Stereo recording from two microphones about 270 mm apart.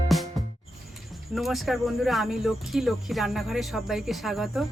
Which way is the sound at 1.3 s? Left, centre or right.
Centre.